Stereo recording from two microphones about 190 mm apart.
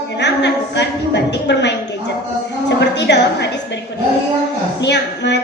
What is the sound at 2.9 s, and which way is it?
Speech, 65° left (ahead or behind).